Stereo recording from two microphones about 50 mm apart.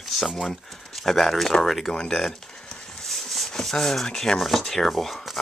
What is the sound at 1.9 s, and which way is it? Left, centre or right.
Speech, centre.